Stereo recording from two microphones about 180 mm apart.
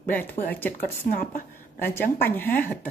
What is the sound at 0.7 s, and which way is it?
Speech, 55° left (ahead or behind).